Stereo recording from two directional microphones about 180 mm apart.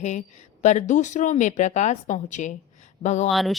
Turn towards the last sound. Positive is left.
turn(degrees=0)  # may be behind; listen again after turning